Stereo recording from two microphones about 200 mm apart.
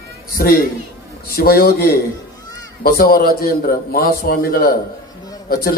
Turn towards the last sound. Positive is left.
turn(degrees=50)  # may be behind; listen again after turning